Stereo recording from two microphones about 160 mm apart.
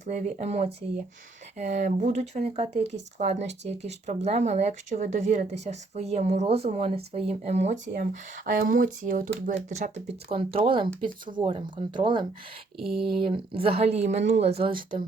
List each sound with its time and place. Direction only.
0.0 s speech: 50° right (ahead or behind)
8.4 s speech: 55° right (ahead or behind)
10.2 s speech: 35° right (ahead or behind)
12.8 s speech: centre (ahead or behind)
13.1 s speech: 35° right (ahead or behind)
14.6 s speech: 30° right (ahead or behind)